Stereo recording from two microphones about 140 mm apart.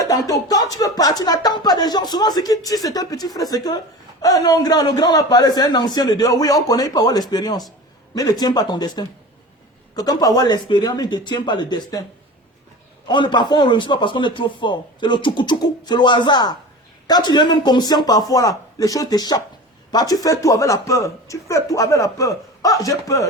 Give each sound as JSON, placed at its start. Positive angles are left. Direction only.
{"t": 0.0, "sound": "speech", "side_deg": 25}
{"t": 13.1, "sound": "a man's voice", "side_deg": 35}